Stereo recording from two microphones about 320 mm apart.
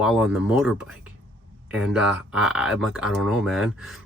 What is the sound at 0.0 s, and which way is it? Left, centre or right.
Speech, centre.